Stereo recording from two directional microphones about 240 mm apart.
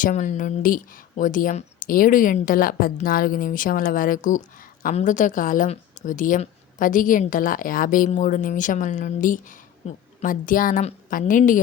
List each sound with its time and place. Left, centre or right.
0.0 s speech: left